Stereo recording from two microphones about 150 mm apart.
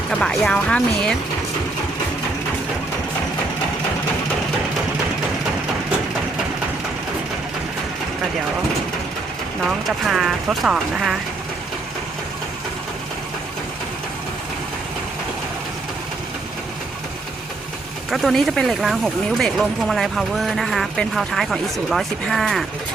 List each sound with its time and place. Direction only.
0.1 s speech: 5° left (ahead or behind)
9.6 s speech: centre (ahead or behind)
18.1 s speech: centre (ahead or behind)